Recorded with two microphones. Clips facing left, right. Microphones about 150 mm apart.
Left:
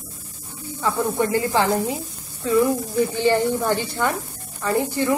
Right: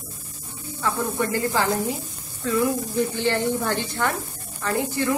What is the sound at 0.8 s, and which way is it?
Speech, 15° left (ahead or behind).